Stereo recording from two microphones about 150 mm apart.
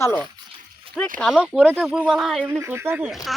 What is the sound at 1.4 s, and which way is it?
Speech, 10° right (ahead or behind).